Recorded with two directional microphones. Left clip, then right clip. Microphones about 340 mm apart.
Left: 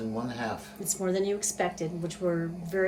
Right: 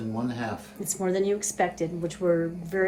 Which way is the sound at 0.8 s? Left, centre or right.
Right.